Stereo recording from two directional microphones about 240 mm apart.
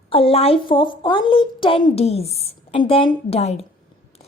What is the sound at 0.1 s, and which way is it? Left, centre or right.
A woman's voice, left.